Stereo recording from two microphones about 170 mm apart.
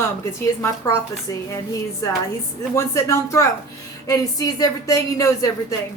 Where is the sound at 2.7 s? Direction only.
15° left (ahead or behind).